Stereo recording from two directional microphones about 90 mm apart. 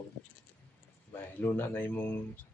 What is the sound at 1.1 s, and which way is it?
Speech, 25° left (ahead or behind).